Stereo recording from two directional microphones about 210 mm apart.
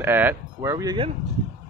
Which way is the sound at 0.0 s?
10° right (ahead or behind).